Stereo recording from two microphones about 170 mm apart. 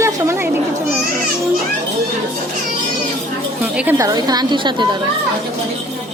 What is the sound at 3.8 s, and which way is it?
A woman's voice, 15° right (ahead or behind).